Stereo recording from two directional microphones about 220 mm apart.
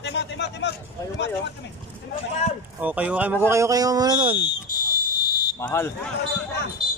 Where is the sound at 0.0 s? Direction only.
50° left (ahead or behind).